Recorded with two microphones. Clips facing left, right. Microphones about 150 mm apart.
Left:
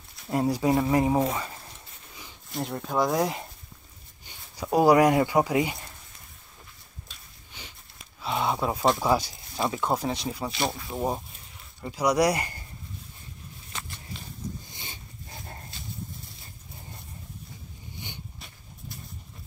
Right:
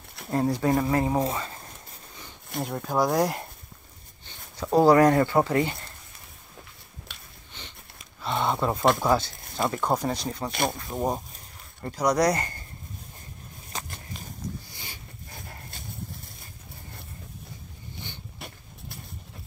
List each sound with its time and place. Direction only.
0.3 s speech: 10° left (ahead or behind)
2.6 s speech: centre (ahead or behind)
4.3 s speech: 10° left (ahead or behind)
7.1 s a sound: 65° right (ahead or behind)
7.5 s sniff: 10° left (ahead or behind)
8.2 s speech: 5° left (ahead or behind)
13.7 s a sound: 40° right (ahead or behind)
14.7 s dog: 20° left (ahead or behind)
15.7 s a sound: 50° right (ahead or behind)